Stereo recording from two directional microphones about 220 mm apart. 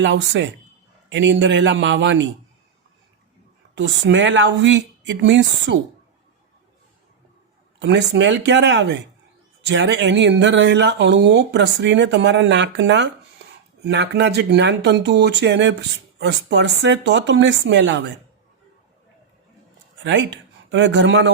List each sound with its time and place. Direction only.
0.0 s speech: 55° right (ahead or behind)
3.8 s speech: 55° right (ahead or behind)
7.8 s speech: 55° right (ahead or behind)
20.1 s speech: 55° right (ahead or behind)